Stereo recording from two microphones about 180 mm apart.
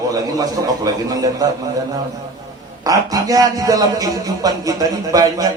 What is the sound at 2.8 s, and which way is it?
Speech, 20° right (ahead or behind).